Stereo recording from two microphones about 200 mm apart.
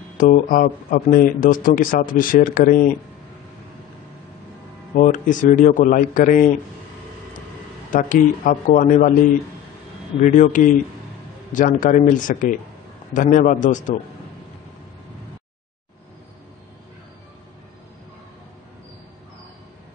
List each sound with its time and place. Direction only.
0.2 s speech: 45° left (ahead or behind)
4.9 s a man's voice: 40° left (ahead or behind)
7.9 s a man's voice: 45° left (ahead or behind)
10.2 s a man's voice: 40° left (ahead or behind)